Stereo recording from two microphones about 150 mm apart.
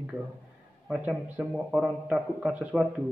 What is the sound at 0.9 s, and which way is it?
A man's voice, 10° right (ahead or behind).